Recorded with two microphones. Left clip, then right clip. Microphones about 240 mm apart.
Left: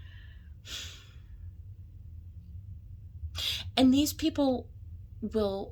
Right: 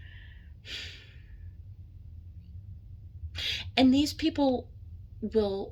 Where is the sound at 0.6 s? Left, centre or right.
Left.